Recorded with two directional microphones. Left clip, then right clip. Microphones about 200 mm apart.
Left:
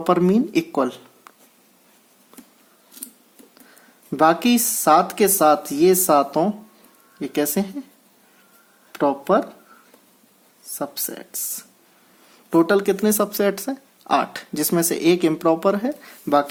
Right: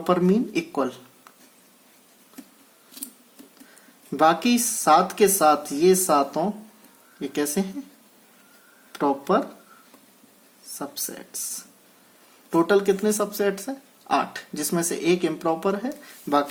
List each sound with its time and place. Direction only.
0.0 s speech: 35° left (ahead or behind)
2.3 s a sound: 35° left (ahead or behind)
4.2 s speech: 35° left (ahead or behind)
8.9 s speech: 30° left (ahead or behind)
10.8 s speech: 30° left (ahead or behind)
12.5 s speech: 35° left (ahead or behind)